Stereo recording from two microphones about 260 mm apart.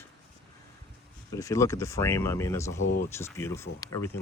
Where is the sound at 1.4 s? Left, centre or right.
Centre.